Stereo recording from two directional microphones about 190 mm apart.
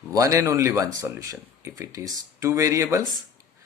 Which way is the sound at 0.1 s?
15° right (ahead or behind).